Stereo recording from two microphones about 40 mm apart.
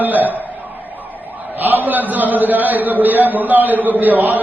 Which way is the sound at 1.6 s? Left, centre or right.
Right.